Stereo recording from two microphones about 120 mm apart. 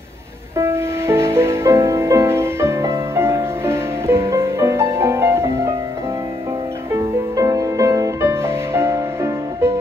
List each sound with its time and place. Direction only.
0.6 s music: 20° right (ahead or behind)
7.0 s music: 30° right (ahead or behind)